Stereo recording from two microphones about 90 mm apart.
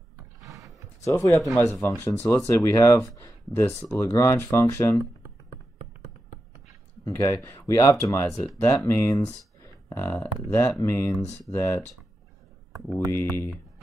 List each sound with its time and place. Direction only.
0.4 s a sound: 35° right (ahead or behind)
1.2 s speech: 40° left (ahead or behind)
1.6 s speech: 30° left (ahead or behind)
7.1 s speech: 35° left (ahead or behind)
9.6 s a sound: 25° left (ahead or behind)
10.5 s speech: 30° left (ahead or behind)
13.1 s speech: 30° left (ahead or behind)